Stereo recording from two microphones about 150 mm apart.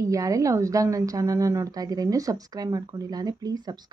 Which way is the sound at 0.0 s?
20° right (ahead or behind).